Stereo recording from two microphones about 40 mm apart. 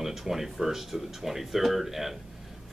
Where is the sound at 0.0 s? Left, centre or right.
Centre.